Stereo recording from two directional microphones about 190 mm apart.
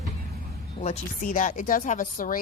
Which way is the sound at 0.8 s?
40° left (ahead or behind).